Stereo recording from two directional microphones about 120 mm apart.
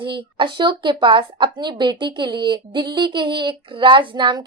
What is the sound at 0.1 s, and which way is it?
A woman's voice, 45° right (ahead or behind).